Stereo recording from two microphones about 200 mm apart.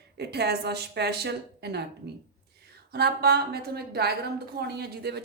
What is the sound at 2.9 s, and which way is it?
A woman's voice, 55° right (ahead or behind).